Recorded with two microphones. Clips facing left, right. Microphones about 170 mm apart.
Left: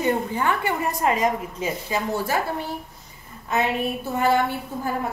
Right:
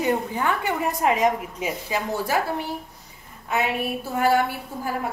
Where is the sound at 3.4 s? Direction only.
10° right (ahead or behind).